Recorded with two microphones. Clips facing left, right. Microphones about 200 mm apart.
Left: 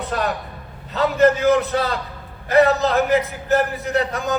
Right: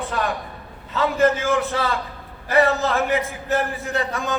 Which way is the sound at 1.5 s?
40° left (ahead or behind).